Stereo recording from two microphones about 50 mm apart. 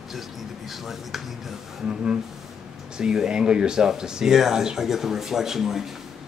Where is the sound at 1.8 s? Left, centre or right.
Centre.